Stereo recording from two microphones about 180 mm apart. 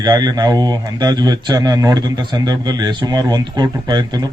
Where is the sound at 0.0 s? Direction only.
20° right (ahead or behind).